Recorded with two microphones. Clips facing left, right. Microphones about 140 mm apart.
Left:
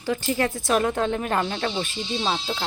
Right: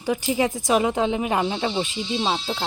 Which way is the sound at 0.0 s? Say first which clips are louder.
Right 2 dB; 15° right (ahead or behind).